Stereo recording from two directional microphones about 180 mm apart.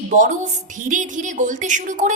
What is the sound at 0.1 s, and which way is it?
A woman's voice, 45° right (ahead or behind).